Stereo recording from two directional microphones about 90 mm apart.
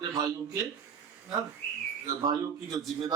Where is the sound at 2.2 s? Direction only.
45° right (ahead or behind).